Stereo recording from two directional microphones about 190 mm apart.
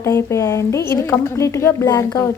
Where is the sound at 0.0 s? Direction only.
15° left (ahead or behind).